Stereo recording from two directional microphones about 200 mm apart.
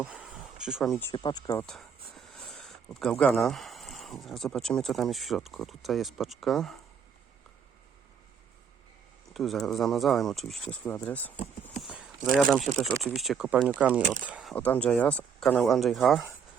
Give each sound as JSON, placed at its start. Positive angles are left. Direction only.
{"t": 0.0, "sound": "a sound", "side_deg": -5}
{"t": 1.1, "sound": "speech", "side_deg": 20}
{"t": 1.6, "sound": "speech", "side_deg": 0}
{"t": 9.3, "sound": "speech", "side_deg": 0}
{"t": 11.8, "sound": "a sound", "side_deg": -5}
{"t": 12.5, "sound": "speech", "side_deg": 0}
{"t": 14.5, "sound": "speech", "side_deg": 5}